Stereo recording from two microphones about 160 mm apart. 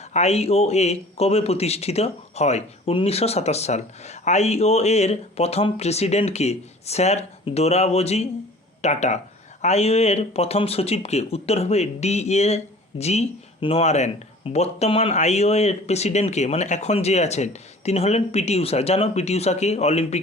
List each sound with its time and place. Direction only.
0.1 s a man's voice: 40° left (ahead or behind)